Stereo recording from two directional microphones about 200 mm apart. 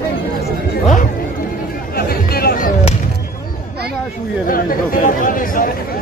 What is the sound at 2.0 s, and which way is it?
Music, 50° left (ahead or behind).